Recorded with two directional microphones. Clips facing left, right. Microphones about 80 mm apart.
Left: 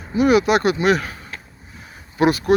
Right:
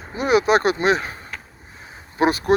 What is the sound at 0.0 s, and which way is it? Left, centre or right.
Speech, right.